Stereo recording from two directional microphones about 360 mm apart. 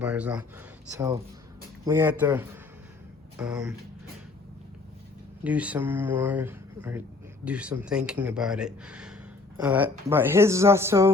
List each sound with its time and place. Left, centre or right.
0.0 s speech: centre
5.4 s speech: centre